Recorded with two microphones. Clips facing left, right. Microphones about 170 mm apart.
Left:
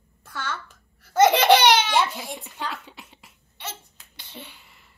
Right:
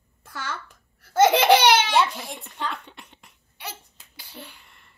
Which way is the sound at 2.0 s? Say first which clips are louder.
Even; 5° left (ahead or behind).